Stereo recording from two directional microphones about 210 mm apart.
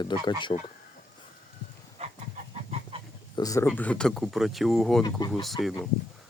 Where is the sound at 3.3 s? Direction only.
15° left (ahead or behind).